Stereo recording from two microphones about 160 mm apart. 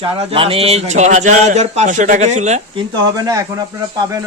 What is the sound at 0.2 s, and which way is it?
A man's voice, 35° right (ahead or behind).